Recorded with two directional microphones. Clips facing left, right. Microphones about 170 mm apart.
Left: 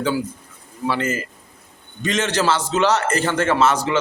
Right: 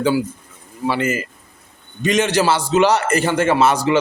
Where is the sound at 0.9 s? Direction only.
10° right (ahead or behind).